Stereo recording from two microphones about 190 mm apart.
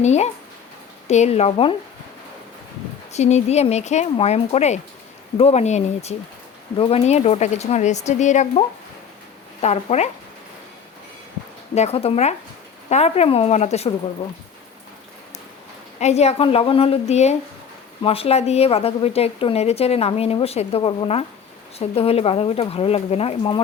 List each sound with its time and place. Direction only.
0.0 s a woman's voice: 35° left (ahead or behind)
3.1 s a woman's voice: 35° left (ahead or behind)
11.7 s a woman's voice: 35° left (ahead or behind)
16.0 s a woman's voice: 35° left (ahead or behind)